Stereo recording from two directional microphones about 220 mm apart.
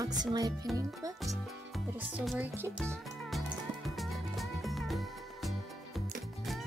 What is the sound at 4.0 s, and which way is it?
Music, centre (ahead or behind).